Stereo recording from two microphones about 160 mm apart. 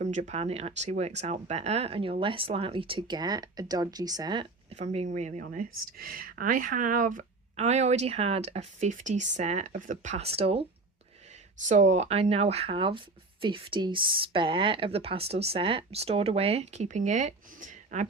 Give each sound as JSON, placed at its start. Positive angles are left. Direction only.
{"t": 0.0, "sound": "speech", "side_deg": -45}
{"t": 4.7, "sound": "speech", "side_deg": -40}
{"t": 10.3, "sound": "speech", "side_deg": -40}
{"t": 11.7, "sound": "speech", "side_deg": -45}